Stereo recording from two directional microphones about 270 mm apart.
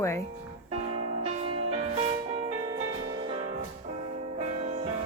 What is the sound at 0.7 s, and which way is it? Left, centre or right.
Music, right.